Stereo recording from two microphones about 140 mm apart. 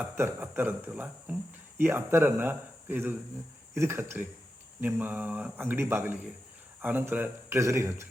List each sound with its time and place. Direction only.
0.0 s speech: 15° right (ahead or behind)